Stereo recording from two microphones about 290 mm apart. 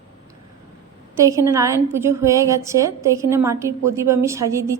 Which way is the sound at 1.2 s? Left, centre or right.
Centre.